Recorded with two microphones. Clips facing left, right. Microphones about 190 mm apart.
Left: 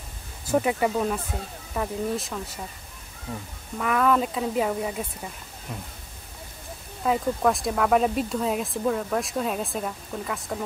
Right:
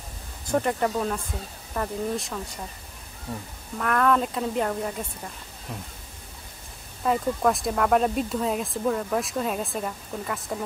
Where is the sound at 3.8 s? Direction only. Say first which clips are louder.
Even; 5° left (ahead or behind).